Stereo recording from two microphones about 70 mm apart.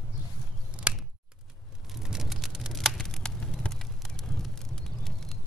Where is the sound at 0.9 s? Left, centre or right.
Centre.